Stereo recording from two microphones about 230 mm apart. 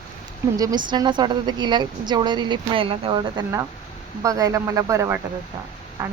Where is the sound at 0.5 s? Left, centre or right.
Centre.